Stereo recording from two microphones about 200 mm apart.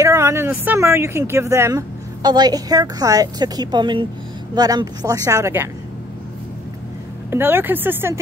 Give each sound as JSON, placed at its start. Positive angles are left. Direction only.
{"t": 0.0, "sound": "speech", "side_deg": -15}
{"t": 7.2, "sound": "speech", "side_deg": -10}